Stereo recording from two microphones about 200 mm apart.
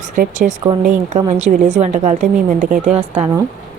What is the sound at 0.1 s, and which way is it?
A woman's voice, 40° right (ahead or behind).